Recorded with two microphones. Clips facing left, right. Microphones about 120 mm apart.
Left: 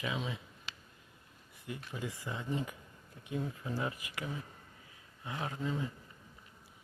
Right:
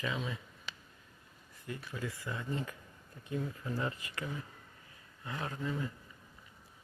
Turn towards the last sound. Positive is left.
turn(degrees=15)  # may be behind; listen again after turning